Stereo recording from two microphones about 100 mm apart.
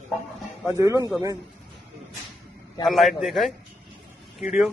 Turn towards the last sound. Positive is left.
turn(degrees=-5)  # may be behind; listen again after turning